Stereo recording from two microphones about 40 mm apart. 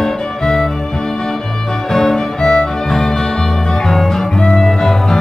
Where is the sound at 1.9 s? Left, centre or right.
Centre.